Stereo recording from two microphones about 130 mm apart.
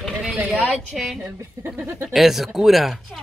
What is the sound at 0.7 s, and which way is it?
Chewing, centre (ahead or behind).